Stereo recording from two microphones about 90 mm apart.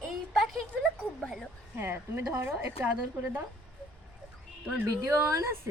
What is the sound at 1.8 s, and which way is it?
Speech, 25° right (ahead or behind).